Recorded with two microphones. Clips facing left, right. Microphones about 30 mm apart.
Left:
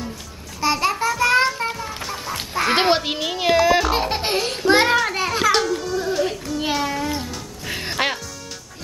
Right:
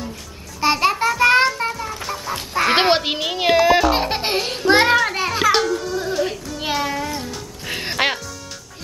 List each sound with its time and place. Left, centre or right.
0.6 s music: centre
1.8 s music: centre
6.6 s child singing: centre
7.2 s music: centre
7.7 s music: centre